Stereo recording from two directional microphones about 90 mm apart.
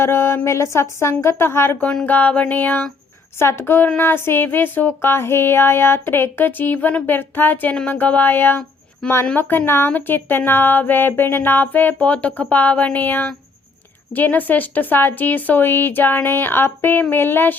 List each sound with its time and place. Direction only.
0.0 s speech: 30° left (ahead or behind)
1.8 s a sound: 10° left (ahead or behind)
2.0 s speech: 20° left (ahead or behind)